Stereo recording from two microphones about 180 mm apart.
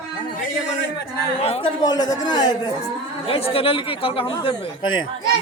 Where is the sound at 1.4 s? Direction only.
20° left (ahead or behind).